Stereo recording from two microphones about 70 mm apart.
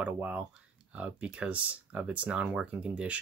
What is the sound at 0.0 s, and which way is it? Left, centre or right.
Speech, right.